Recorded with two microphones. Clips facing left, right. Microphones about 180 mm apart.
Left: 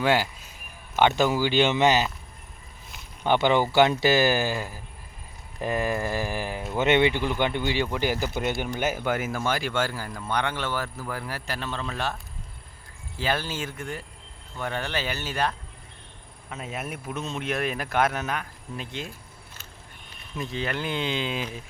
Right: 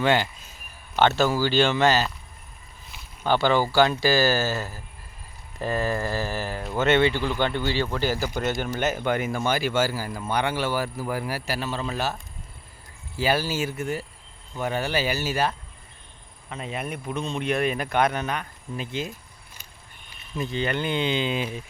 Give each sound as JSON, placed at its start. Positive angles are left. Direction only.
{"t": 0.0, "sound": "speech", "side_deg": 5}
{"t": 3.2, "sound": "speech", "side_deg": 20}
{"t": 13.1, "sound": "speech", "side_deg": -10}
{"t": 20.1, "sound": "speech", "side_deg": 0}